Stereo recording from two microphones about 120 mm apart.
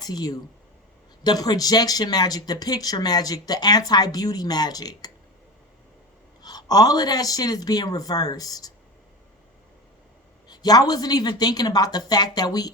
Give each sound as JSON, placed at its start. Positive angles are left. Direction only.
{"t": 0.0, "sound": "speech", "side_deg": 35}
{"t": 6.4, "sound": "speech", "side_deg": 35}
{"t": 10.5, "sound": "speech", "side_deg": 35}